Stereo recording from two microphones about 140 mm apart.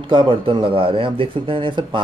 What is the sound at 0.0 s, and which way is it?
Speech, 35° right (ahead or behind).